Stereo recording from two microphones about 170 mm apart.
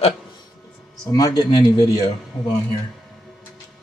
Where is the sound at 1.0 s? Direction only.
20° left (ahead or behind).